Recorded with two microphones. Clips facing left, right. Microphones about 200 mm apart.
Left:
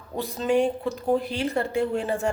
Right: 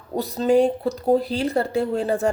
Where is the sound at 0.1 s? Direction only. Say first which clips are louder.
Right 5 dB; 35° right (ahead or behind).